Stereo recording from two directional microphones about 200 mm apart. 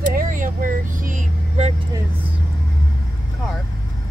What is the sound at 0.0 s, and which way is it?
Vehicle, 40° right (ahead or behind).